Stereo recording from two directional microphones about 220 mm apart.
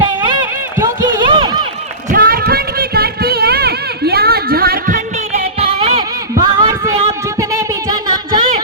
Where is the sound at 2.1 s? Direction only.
40° right (ahead or behind).